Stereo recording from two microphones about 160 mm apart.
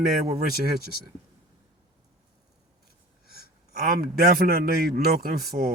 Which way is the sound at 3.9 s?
70° right (ahead or behind).